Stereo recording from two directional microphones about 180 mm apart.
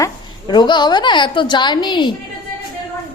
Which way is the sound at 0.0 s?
25° left (ahead or behind).